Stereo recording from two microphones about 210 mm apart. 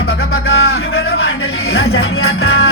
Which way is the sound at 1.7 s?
75° left (ahead or behind).